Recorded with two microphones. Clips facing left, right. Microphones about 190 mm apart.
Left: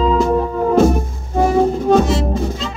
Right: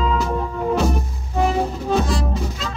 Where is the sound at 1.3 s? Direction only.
45° left (ahead or behind).